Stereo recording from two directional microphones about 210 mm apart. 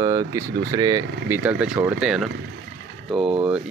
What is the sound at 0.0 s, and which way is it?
Speech, 15° right (ahead or behind).